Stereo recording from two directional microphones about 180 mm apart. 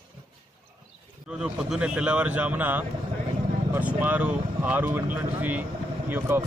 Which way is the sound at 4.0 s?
10° right (ahead or behind).